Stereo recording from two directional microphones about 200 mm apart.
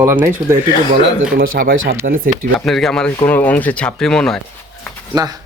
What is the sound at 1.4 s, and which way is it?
Speech, 50° right (ahead or behind).